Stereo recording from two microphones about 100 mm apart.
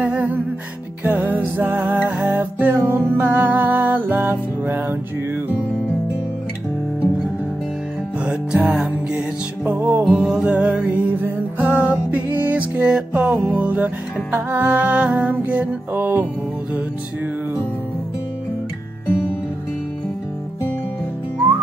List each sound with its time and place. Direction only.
0.0 s music: 15° right (ahead or behind)
8.2 s music: 10° right (ahead or behind)
10.0 s music: 10° right (ahead or behind)